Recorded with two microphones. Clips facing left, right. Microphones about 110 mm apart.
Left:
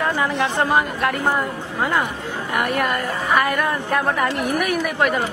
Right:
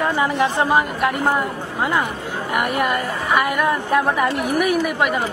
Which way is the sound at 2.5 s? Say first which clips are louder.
Right 1 dB; 5° right (ahead or behind).